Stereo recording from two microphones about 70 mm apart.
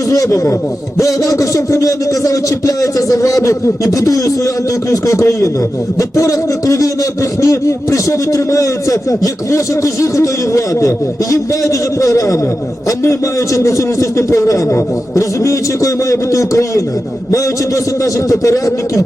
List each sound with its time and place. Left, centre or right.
0.1 s a man's voice: left
18.0 s a man's voice: left